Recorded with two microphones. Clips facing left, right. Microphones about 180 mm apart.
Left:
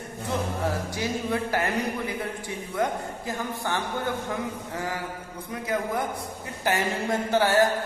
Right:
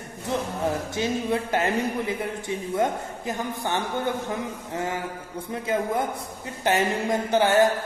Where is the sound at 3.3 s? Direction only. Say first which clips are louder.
Right 2 dB; 20° right (ahead or behind).